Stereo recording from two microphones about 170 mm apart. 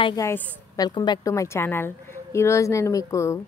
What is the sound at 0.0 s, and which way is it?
Speech, 20° left (ahead or behind).